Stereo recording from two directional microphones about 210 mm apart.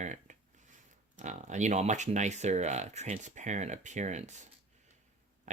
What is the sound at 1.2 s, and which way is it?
Speech, 35° right (ahead or behind).